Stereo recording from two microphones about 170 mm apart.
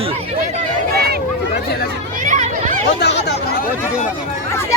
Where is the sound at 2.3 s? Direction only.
45° right (ahead or behind).